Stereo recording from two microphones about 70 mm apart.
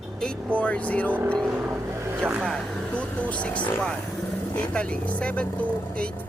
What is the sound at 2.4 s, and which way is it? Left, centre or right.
Speech, centre.